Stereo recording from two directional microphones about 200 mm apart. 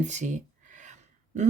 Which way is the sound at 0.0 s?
35° right (ahead or behind).